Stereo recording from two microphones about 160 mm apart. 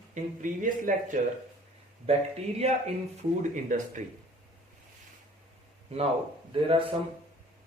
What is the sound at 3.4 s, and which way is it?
Speech, 50° right (ahead or behind).